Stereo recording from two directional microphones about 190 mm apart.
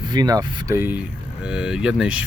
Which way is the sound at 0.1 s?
20° right (ahead or behind).